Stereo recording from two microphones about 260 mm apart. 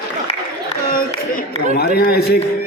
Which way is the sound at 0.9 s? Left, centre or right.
Left.